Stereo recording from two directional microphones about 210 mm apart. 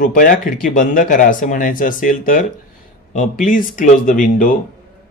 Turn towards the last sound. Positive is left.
turn(degrees=40)  # may be behind; listen again after turning